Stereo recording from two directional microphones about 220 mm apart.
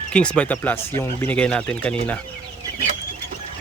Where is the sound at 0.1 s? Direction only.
5° left (ahead or behind).